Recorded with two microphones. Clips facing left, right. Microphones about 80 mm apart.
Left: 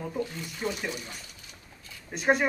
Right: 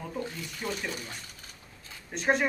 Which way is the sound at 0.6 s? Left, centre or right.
Centre.